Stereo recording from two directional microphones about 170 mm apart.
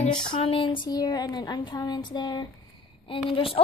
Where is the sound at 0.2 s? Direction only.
30° left (ahead or behind).